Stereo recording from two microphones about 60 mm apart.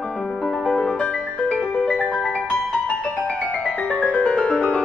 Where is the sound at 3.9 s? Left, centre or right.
Left.